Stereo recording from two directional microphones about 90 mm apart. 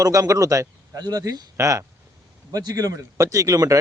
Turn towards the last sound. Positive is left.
turn(degrees=-35)  # may be behind; listen again after turning